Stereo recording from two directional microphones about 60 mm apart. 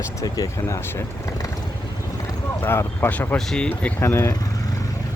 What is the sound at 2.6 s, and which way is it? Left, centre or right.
Speech, left.